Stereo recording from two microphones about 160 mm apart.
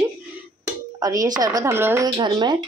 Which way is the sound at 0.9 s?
20° right (ahead or behind).